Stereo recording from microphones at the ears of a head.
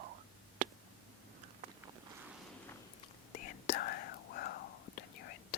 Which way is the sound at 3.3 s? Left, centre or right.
Left.